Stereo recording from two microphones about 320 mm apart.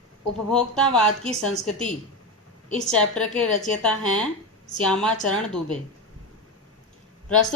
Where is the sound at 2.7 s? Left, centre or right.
Centre.